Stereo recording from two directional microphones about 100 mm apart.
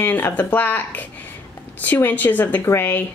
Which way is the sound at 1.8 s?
20° left (ahead or behind).